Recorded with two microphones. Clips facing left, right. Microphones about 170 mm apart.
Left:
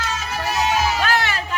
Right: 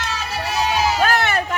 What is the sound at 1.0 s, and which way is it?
Music, 55° right (ahead or behind).